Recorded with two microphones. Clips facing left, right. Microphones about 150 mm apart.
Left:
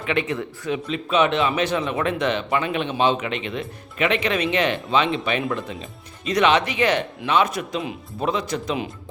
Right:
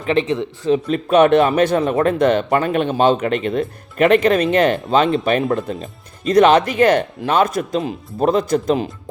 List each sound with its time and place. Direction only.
0.0 s speech: 35° right (ahead or behind)
0.3 s speech: 20° right (ahead or behind)
0.9 s speech: 50° right (ahead or behind)